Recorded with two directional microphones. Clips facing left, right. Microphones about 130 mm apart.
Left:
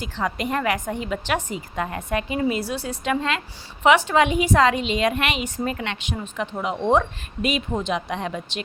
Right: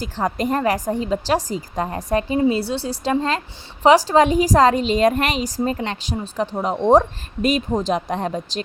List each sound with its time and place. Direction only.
0.3 s a woman's voice: 40° right (ahead or behind)